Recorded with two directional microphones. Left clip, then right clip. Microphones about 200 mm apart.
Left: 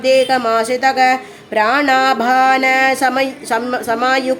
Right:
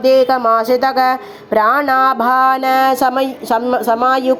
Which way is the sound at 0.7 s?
15° right (ahead or behind).